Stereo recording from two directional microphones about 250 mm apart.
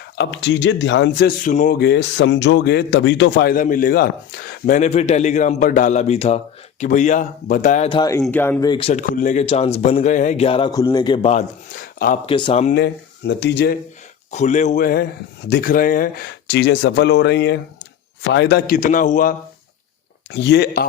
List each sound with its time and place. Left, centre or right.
0.2 s speech: left; by 8.9 s centre
8.9 s speech: left
12.2 s speech: centre
12.7 s speech: left
14.3 s speech: left
20.3 s speech: left